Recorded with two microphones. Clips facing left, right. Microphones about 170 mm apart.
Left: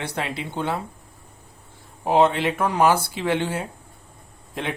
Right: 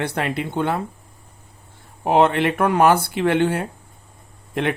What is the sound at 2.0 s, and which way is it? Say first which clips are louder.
Speech: right 2 dB; 60° right (ahead or behind).